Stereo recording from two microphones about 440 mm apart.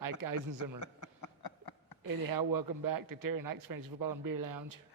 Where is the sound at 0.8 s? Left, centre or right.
Left.